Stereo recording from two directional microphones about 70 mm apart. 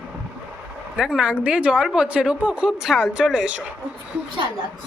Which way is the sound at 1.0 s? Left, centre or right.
Centre.